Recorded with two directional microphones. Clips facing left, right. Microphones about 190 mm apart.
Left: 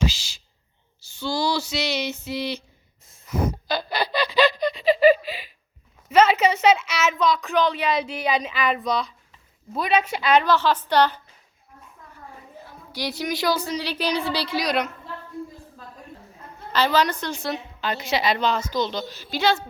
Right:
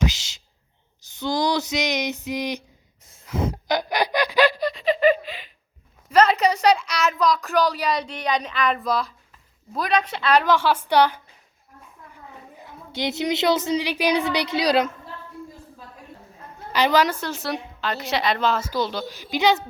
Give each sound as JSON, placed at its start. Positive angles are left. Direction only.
{"t": 0.1, "sound": "a woman's voice", "side_deg": -20}
{"t": 3.3, "sound": "a sound", "side_deg": -20}
{"t": 6.1, "sound": "a woman's voice", "side_deg": 5}
{"t": 10.5, "sound": "a woman's voice", "side_deg": -10}
{"t": 12.6, "sound": "a woman's voice", "side_deg": -20}
{"t": 16.7, "sound": "a woman's voice", "side_deg": -15}